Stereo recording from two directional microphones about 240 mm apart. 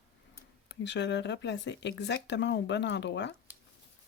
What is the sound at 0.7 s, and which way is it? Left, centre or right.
Speech, left.